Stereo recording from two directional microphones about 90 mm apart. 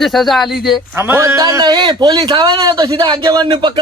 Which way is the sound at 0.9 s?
25° right (ahead or behind).